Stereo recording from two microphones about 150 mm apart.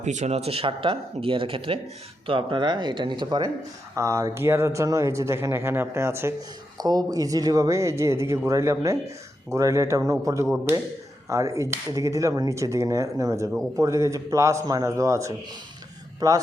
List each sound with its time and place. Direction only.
0.0 s speech: 50° right (ahead or behind); by 16.4 s 25° right (ahead or behind)